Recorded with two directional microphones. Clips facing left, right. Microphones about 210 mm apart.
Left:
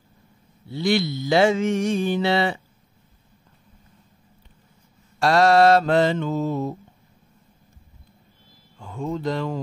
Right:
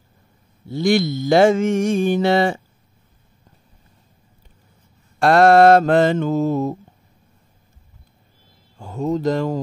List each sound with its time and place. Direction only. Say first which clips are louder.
0.7 s mantra: right 4 dB; 45° right (ahead or behind)
5.2 s mantra: right 4 dB; 55° right (ahead or behind)
8.7 s speech: right 6 dB; 40° right (ahead or behind)